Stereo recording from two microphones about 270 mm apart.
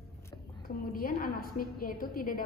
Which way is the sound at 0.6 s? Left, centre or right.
Left.